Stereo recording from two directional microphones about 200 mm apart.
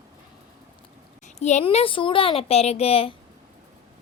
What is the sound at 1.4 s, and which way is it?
A woman's voice, 35° left (ahead or behind).